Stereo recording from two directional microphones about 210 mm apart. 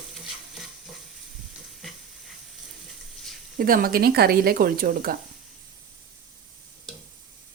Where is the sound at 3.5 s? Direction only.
45° right (ahead or behind).